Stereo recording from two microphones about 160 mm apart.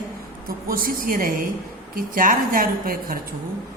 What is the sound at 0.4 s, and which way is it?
A woman's voice, 65° right (ahead or behind).